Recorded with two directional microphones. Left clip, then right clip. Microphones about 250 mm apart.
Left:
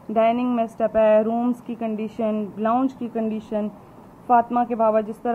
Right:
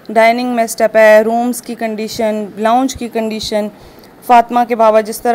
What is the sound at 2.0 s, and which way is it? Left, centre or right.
Speech, centre.